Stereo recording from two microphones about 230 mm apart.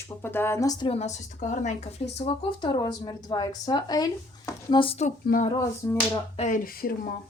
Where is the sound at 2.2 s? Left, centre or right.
Centre.